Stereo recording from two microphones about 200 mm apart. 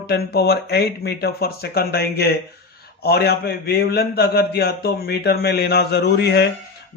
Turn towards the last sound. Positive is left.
turn(degrees=55)  # may be behind; listen again after turning